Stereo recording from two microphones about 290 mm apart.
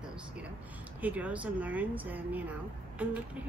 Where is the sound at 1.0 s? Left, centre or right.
Centre.